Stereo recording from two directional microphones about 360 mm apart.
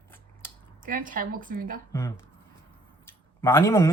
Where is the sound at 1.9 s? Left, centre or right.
Centre.